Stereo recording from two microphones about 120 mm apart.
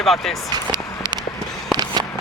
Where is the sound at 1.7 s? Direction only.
35° right (ahead or behind).